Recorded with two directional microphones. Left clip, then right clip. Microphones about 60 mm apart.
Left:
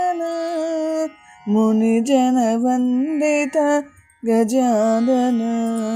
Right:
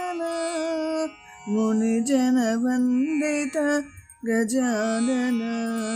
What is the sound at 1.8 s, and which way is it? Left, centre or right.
Music, left.